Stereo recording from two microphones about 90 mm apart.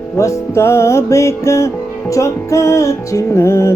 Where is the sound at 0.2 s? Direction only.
30° left (ahead or behind).